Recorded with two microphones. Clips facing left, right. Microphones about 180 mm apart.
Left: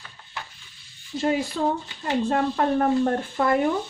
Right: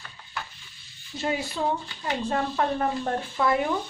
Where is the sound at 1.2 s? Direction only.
45° left (ahead or behind).